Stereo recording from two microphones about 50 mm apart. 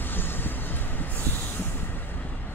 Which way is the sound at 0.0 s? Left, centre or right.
Left.